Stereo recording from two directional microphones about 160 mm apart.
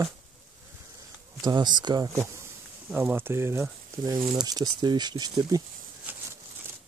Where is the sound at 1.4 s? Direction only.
25° right (ahead or behind).